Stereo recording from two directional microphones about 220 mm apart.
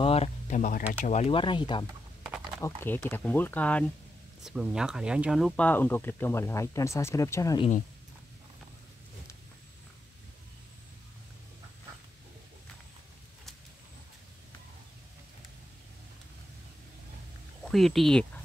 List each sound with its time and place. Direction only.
0.0 s a sound: 25° left (ahead or behind)
1.0 s speech: 30° left (ahead or behind); by 7.6 s 15° left (ahead or behind)
17.6 s speech: centre (ahead or behind)